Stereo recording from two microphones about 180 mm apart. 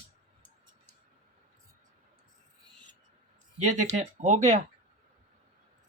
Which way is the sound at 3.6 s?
40° right (ahead or behind).